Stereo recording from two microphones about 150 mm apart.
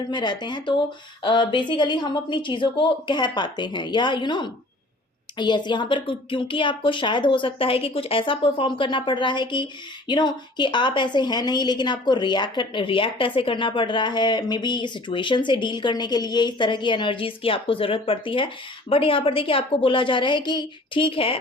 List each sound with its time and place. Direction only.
0.1 s a woman's voice: 30° left (ahead or behind)